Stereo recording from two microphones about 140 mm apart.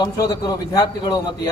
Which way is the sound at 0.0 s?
25° left (ahead or behind).